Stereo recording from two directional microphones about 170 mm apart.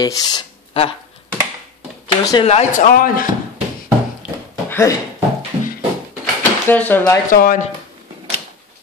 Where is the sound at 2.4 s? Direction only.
40° left (ahead or behind).